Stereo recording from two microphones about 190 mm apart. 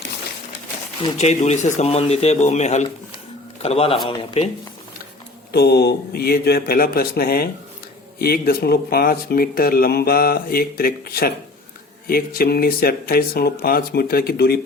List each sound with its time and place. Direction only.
1.0 s speech: 35° left (ahead or behind)
5.5 s speech: 60° left (ahead or behind)